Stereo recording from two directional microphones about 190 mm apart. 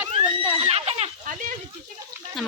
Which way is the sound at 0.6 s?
35° right (ahead or behind).